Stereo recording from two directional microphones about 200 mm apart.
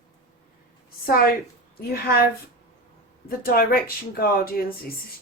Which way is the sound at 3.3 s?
45° left (ahead or behind).